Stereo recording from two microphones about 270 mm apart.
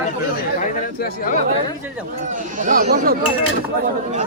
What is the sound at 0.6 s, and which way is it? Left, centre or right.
Speech, left.